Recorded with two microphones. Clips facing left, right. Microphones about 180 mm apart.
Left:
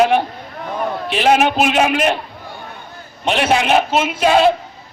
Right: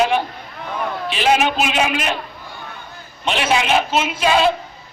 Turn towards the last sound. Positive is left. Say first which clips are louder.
# left 3 dB
turn(degrees=55)  # may be behind; listen again after turning